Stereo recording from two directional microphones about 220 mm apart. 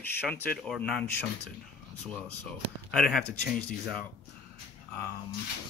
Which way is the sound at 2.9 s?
Centre (ahead or behind).